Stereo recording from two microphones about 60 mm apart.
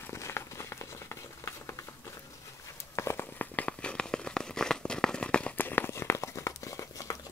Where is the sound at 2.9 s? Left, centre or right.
Left.